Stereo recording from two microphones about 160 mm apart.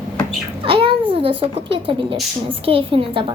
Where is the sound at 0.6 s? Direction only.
35° right (ahead or behind).